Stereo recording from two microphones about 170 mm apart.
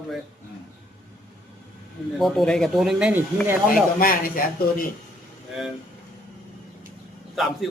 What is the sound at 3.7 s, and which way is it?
A man's voice, 55° left (ahead or behind).